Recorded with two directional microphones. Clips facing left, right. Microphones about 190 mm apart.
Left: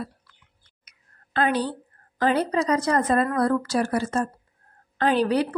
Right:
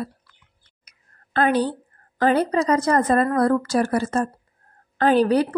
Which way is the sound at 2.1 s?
50° right (ahead or behind).